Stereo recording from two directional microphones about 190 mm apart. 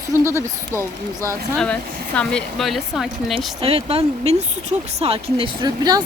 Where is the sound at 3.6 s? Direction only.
30° right (ahead or behind).